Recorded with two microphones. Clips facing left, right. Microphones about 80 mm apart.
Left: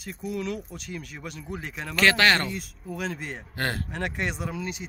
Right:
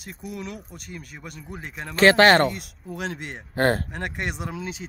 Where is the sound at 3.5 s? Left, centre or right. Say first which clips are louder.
Right 9 dB; right.